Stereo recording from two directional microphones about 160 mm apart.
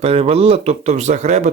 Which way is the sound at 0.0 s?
40° right (ahead or behind).